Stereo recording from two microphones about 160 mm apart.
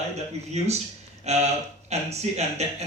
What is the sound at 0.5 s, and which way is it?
Speech, 45° right (ahead or behind).